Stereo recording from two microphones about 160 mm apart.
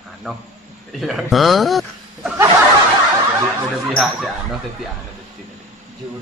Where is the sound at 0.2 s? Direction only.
Centre (ahead or behind).